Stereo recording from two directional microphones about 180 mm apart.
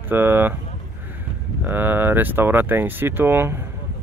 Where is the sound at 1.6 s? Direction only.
10° right (ahead or behind).